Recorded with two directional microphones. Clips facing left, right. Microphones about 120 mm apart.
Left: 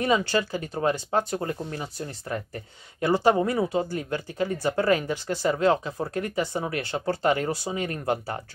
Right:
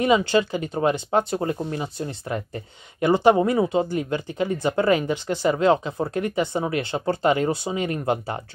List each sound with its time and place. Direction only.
0.0 s speech: 15° right (ahead or behind)